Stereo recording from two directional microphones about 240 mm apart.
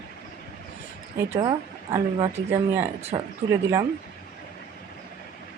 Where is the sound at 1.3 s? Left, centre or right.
Centre.